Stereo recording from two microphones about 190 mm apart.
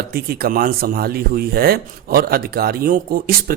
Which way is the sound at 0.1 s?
55° right (ahead or behind).